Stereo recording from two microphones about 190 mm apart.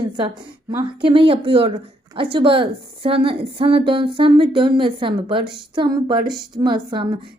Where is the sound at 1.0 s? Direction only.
25° right (ahead or behind).